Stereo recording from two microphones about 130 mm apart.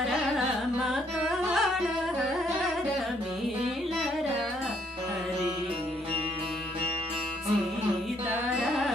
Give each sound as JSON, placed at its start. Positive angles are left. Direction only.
{"t": 1.5, "sound": "music", "side_deg": 0}
{"t": 8.5, "sound": "carnatic music", "side_deg": -5}